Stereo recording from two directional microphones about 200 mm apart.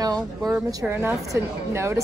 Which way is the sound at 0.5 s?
10° right (ahead or behind).